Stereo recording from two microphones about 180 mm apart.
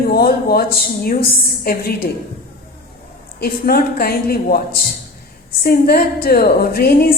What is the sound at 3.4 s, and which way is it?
A woman's voice, 60° left (ahead or behind).